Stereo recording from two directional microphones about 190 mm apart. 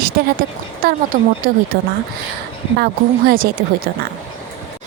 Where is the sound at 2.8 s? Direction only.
50° right (ahead or behind).